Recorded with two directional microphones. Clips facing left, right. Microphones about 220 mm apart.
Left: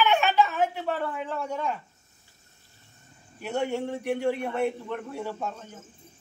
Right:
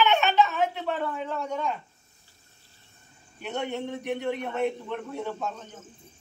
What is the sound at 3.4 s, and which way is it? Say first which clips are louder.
Speech: left 3 dB; 5° left (ahead or behind).